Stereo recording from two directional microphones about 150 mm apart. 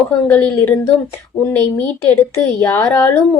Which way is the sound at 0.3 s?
10° left (ahead or behind).